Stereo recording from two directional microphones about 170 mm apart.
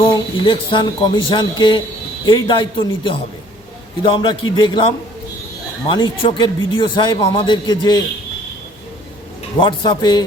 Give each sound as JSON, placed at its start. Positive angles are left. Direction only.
{"t": 0.0, "sound": "speech", "side_deg": 25}
{"t": 6.0, "sound": "speech", "side_deg": 25}
{"t": 9.6, "sound": "speech", "side_deg": 25}